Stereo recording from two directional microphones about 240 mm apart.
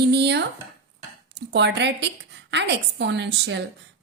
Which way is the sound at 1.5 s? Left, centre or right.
Right.